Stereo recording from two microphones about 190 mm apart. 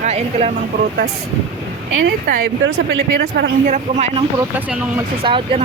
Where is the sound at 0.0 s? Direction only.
35° right (ahead or behind).